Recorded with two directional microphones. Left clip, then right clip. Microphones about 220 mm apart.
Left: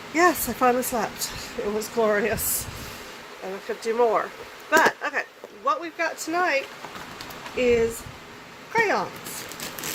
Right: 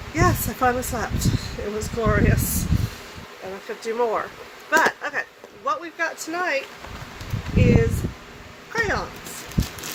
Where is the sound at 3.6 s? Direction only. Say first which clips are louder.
Left 2 dB; 20° left (ahead or behind).